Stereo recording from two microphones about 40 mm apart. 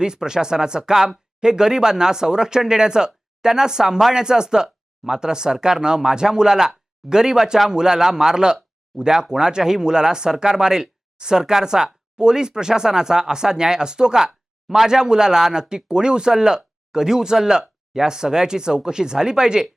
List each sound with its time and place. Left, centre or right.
0.0 s speech: centre